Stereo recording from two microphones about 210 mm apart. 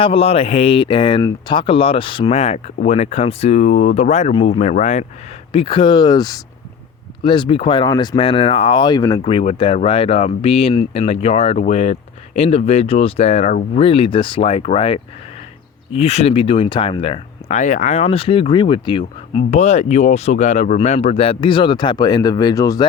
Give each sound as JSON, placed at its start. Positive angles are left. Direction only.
{"t": 0.0, "sound": "speech", "side_deg": 25}
{"t": 9.2, "sound": "speech", "side_deg": 30}